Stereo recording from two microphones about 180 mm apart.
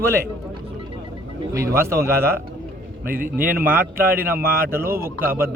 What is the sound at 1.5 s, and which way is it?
Speech, 15° right (ahead or behind).